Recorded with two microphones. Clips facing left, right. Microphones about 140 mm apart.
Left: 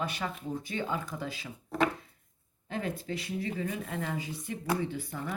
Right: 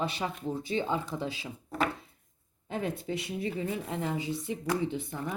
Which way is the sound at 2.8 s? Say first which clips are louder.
Right 2 dB; 20° right (ahead or behind).